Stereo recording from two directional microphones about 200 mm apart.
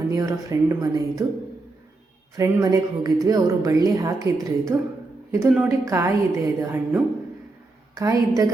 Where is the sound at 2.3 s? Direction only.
15° right (ahead or behind).